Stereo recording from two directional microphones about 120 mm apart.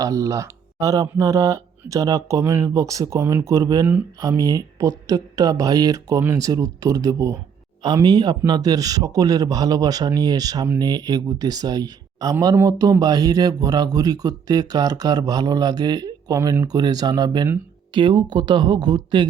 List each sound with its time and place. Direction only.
0.0 s speech: 30° right (ahead or behind)